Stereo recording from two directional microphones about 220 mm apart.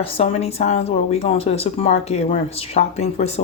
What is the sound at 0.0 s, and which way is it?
Speech, 30° left (ahead or behind).